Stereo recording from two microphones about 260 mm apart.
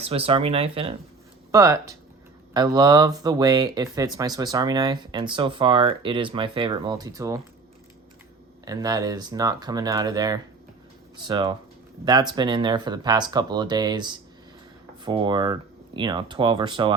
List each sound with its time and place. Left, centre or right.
0.0 s speech: right
8.6 s speech: centre